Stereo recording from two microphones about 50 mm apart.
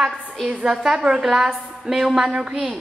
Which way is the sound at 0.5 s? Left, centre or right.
Centre.